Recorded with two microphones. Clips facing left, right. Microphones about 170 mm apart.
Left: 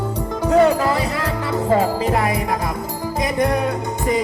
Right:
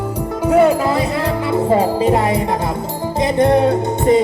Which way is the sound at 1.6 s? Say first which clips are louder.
Right 3 dB; 15° right (ahead or behind).